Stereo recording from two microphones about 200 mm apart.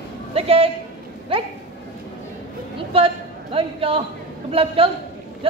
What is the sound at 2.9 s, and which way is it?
A man's voice, 30° right (ahead or behind).